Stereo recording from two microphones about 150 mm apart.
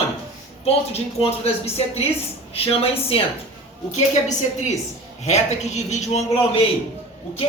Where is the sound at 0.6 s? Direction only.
40° left (ahead or behind).